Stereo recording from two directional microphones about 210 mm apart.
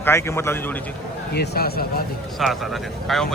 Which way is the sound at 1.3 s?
50° left (ahead or behind).